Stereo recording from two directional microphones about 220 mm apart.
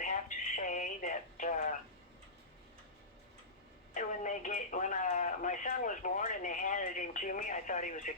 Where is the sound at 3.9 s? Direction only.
35° left (ahead or behind).